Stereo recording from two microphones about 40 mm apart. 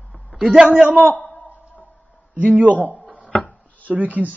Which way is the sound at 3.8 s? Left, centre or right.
Right.